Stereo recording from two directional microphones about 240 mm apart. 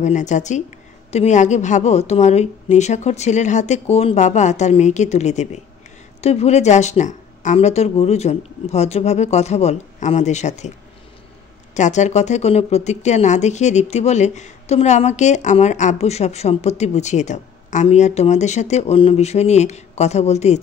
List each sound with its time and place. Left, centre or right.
0.0 s a woman's voice: left
11.7 s a woman's voice: left